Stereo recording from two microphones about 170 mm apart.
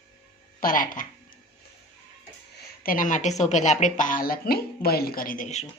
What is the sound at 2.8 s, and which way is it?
A woman's voice, 55° left (ahead or behind).